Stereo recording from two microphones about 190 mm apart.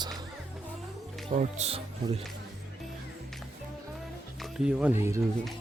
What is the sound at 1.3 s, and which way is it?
Speech, 35° right (ahead or behind).